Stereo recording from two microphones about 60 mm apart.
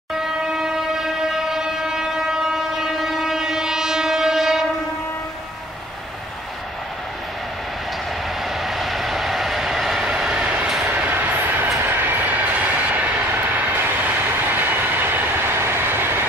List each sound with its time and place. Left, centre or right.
0.6 s train: centre
8.5 s vehicle: centre
11.0 s train: right
12.0 s vehicle: right
13.6 s train: right